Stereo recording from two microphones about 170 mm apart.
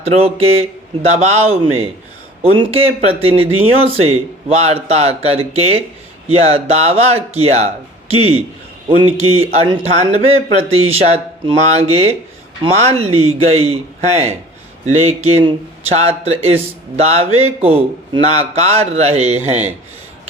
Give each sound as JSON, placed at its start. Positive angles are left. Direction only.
{"t": 0.0, "sound": "speech", "side_deg": -35}
{"t": 14.8, "sound": "speech", "side_deg": -35}